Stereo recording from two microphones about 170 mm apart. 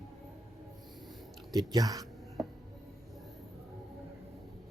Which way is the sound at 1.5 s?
20° right (ahead or behind).